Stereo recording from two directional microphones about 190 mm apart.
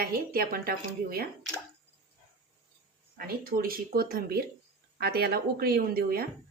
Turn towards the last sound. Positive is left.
turn(degrees=-50)  # may be behind; listen again after turning